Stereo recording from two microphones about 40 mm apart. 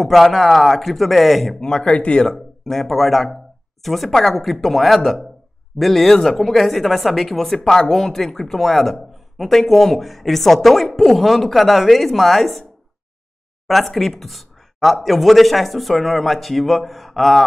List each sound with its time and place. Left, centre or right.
0.0 s speech: centre
1.6 s speech: centre
2.0 s speech: left
2.2 s speech: centre
13.7 s speech: centre